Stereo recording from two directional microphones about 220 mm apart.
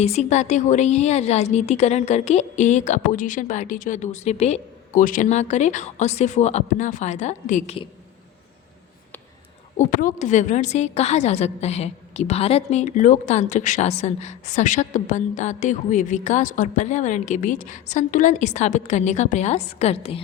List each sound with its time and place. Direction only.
0.0 s a woman's voice: 30° left (ahead or behind)
9.7 s a woman's voice: 35° left (ahead or behind)